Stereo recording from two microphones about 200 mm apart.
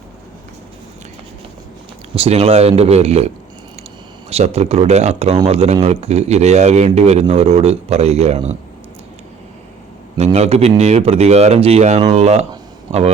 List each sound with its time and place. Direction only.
2.1 s speech: 30° right (ahead or behind)
4.3 s speech: 30° right (ahead or behind)
10.2 s speech: 30° right (ahead or behind)